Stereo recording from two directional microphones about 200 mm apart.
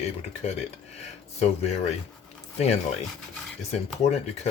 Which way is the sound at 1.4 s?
35° left (ahead or behind).